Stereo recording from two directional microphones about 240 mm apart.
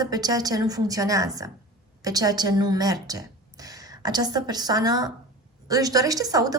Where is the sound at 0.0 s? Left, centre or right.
Centre.